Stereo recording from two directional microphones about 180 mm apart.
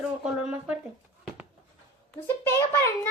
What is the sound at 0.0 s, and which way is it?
Speech, 5° right (ahead or behind).